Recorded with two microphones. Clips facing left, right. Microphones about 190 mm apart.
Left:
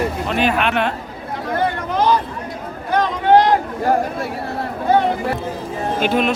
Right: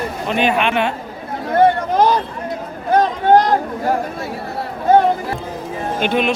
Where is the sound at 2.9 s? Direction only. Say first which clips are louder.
Right 1 dB; 45° right (ahead or behind).